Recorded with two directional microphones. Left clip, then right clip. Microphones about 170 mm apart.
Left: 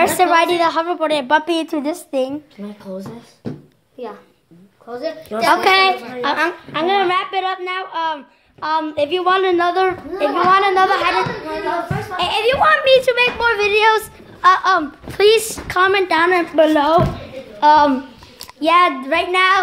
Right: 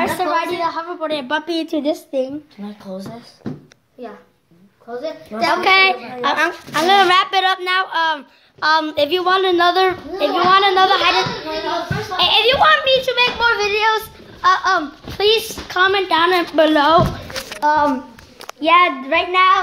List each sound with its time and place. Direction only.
0.0 s a woman's voice: 45° left (ahead or behind)
1.1 s a child's voice: 35° left (ahead or behind)
2.0 s speech: 40° left (ahead or behind)
2.6 s a child's voice: 20° left (ahead or behind)
5.3 s speech: 40° left (ahead or behind)
5.6 s a child's voice: 20° left (ahead or behind)
6.3 s speech: 5° left (ahead or behind)
12.8 s a child's voice: 45° left (ahead or behind)
15.7 s a woman's voice: 20° left (ahead or behind)
16.5 s a woman's voice: centre (ahead or behind)
19.3 s speech: 30° left (ahead or behind)